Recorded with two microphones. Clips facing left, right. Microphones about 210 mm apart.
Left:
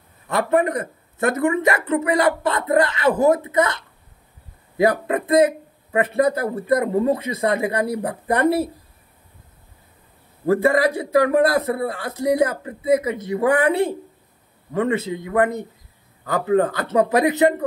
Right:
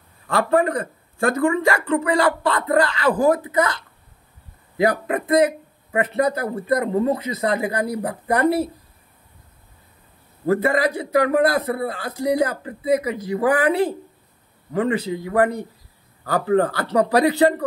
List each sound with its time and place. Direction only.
0.3 s a man's voice: 20° left (ahead or behind)
10.4 s a man's voice: 25° left (ahead or behind)